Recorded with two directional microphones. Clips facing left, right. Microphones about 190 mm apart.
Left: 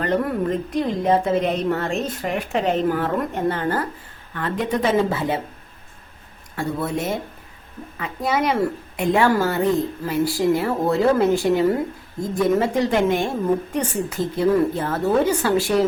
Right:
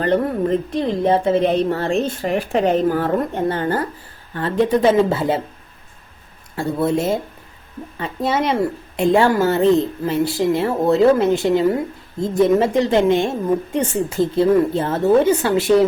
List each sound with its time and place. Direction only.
0.0 s a woman's voice: 30° right (ahead or behind)
6.6 s a woman's voice: 30° right (ahead or behind)